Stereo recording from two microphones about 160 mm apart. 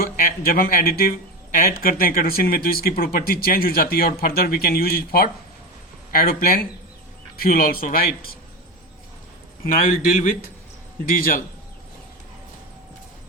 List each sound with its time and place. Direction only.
0.0 s a man's voice: 65° left (ahead or behind)
9.6 s a man's voice: 55° left (ahead or behind)
11.0 s speech: 65° left (ahead or behind)